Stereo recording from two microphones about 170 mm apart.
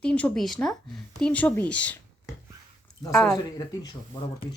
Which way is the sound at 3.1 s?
5° left (ahead or behind).